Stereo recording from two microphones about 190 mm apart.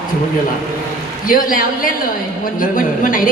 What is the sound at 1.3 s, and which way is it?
A woman's voice, 45° left (ahead or behind).